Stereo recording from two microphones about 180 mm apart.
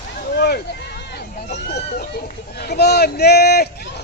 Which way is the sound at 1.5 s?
70° left (ahead or behind).